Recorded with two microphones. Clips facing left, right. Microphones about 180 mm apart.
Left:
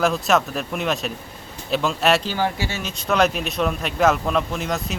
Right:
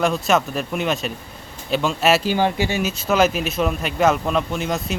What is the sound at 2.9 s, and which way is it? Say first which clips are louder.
Speech: left 1 dB; 5° right (ahead or behind).